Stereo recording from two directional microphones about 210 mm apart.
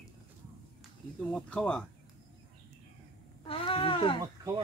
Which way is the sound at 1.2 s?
Centre (ahead or behind).